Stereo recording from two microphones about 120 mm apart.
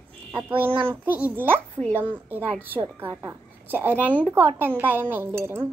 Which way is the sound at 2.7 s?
20° right (ahead or behind).